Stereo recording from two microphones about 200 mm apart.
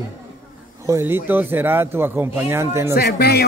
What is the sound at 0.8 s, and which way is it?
A man's voice, 10° right (ahead or behind).